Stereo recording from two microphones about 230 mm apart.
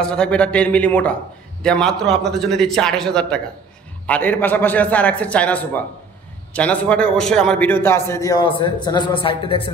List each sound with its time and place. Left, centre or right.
0.0 s a man's voice: centre; by 9.6 s left